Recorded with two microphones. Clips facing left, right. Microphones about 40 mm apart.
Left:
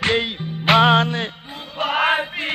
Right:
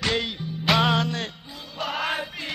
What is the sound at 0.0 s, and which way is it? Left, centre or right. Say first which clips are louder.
Music: left 6 dB; left.